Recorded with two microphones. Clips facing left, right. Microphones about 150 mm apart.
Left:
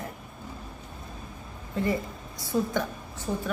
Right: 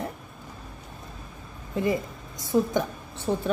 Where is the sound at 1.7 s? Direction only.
15° right (ahead or behind).